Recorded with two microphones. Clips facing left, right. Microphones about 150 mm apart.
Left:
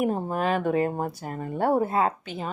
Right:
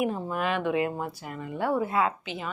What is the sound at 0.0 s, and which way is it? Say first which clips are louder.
Speech: left 3 dB; 40° left (ahead or behind).